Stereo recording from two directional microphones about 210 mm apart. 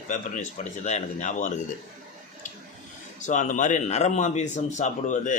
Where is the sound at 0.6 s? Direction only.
35° left (ahead or behind).